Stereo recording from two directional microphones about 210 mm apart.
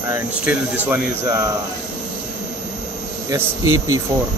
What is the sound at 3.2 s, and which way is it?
Speech, 15° right (ahead or behind).